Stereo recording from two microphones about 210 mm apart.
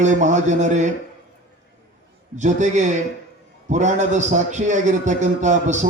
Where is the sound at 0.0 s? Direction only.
35° right (ahead or behind).